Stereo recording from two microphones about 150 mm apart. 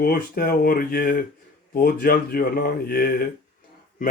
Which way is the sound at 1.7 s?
85° left.